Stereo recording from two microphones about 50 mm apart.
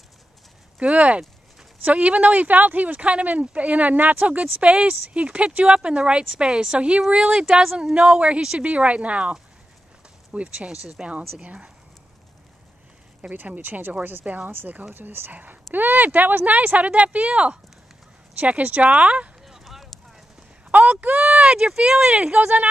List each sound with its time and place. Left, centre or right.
0.7 s a woman's voice: right
13.2 s speech: right
14.2 s speech: right
15.0 s speech: right
19.4 s a sound: centre
20.7 s speech: right